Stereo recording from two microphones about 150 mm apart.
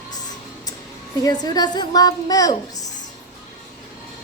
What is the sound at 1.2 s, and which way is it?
A woman's voice, 25° left (ahead or behind).